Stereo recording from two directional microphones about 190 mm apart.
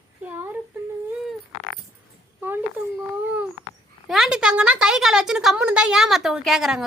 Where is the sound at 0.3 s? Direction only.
10° right (ahead or behind).